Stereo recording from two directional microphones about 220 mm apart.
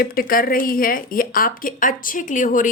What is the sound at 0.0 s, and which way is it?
Speech, 40° left (ahead or behind).